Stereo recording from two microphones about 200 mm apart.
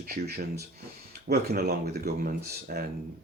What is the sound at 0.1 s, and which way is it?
Speech, 50° right (ahead or behind).